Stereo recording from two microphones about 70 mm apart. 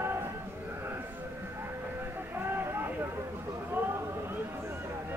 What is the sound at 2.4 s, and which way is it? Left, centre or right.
Vehicle, right.